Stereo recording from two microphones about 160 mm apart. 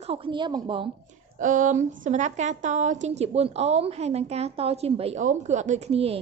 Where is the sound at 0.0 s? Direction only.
35° right (ahead or behind).